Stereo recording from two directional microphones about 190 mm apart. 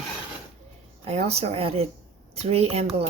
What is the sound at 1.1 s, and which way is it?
Speech, 30° right (ahead or behind).